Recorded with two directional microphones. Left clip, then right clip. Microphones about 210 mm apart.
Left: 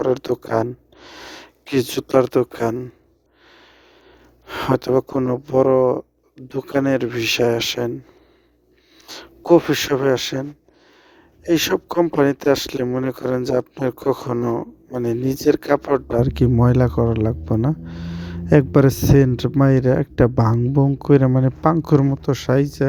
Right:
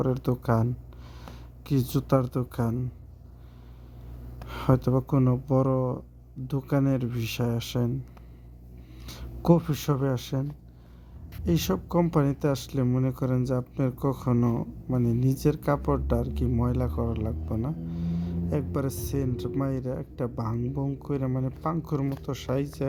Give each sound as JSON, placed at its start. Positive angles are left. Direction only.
{"t": 0.0, "sound": "speech", "side_deg": 35}
{"t": 4.4, "sound": "speech", "side_deg": 40}
{"t": 9.0, "sound": "speech", "side_deg": 40}
{"t": 11.4, "sound": "speech", "side_deg": 40}
{"t": 14.4, "sound": "speech", "side_deg": 25}
{"t": 15.3, "sound": "speech", "side_deg": 40}
{"t": 20.6, "sound": "speech", "side_deg": 30}